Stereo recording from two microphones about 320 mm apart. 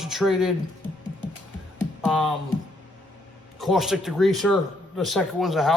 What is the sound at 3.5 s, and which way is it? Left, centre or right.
Speech, centre.